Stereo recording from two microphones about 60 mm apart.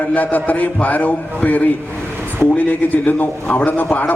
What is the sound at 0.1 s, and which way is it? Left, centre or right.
A man's voice, left.